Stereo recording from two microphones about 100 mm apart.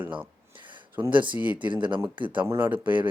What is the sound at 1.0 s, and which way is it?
Speech, 55° right (ahead or behind).